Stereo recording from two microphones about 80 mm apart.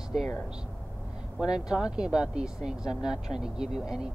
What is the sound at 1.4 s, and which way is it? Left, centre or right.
Speech, centre.